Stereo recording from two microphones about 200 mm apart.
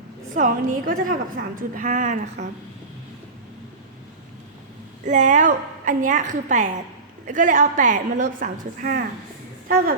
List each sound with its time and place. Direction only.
0.3 s a woman's voice: 40° right (ahead or behind)
5.0 s a woman's voice: 40° right (ahead or behind)